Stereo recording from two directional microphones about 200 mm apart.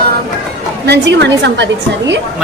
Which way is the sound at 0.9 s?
60° right (ahead or behind).